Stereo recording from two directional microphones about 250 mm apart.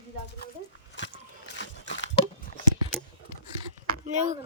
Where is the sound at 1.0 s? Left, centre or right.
Left.